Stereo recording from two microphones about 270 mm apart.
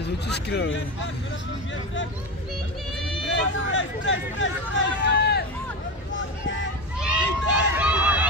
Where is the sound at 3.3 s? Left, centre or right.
Left.